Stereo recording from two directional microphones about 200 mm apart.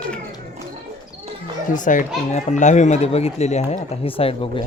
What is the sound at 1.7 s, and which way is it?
Speech, 40° left (ahead or behind).